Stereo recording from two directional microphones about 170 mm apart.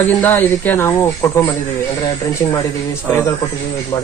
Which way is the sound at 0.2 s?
10° left (ahead or behind).